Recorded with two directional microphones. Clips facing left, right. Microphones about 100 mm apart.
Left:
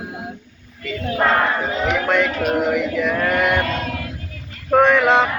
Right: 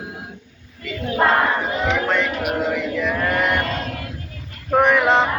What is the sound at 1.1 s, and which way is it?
Female singing, 20° right (ahead or behind).